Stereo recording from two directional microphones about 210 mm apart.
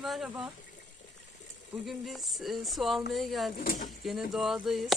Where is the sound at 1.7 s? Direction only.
Centre (ahead or behind).